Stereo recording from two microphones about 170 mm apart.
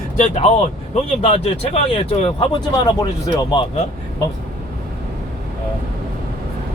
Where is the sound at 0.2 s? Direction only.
40° left (ahead or behind).